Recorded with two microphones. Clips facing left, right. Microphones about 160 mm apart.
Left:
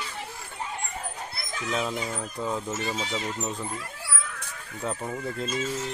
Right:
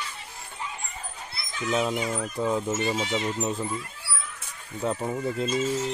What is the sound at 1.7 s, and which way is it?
Speech, 5° right (ahead or behind).